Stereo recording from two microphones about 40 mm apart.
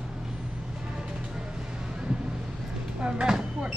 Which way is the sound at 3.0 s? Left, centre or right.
Right.